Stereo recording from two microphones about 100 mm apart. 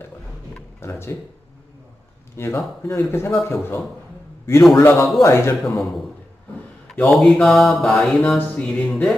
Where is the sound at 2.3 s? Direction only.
25° left (ahead or behind).